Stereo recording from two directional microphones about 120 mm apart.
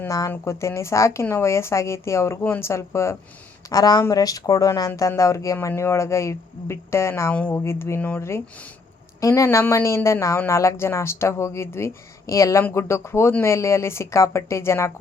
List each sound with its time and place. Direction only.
0.1 s speech: 25° left (ahead or behind)